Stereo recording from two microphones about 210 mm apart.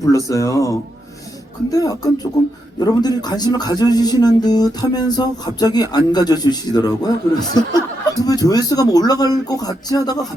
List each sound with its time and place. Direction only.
0.3 s speech: 15° left (ahead or behind)
2.7 s a sound: 20° left (ahead or behind)
8.2 s speech: 20° left (ahead or behind)